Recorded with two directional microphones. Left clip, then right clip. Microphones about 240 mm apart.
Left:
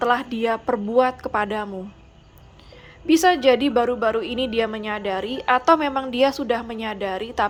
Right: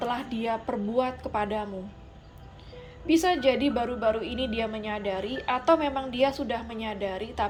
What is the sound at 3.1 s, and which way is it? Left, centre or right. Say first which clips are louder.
A woman's voice: left 7 dB; centre.